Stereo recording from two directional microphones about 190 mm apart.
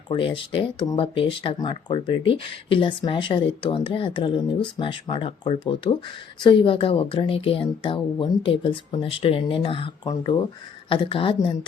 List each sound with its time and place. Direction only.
0.1 s speech: 25° left (ahead or behind)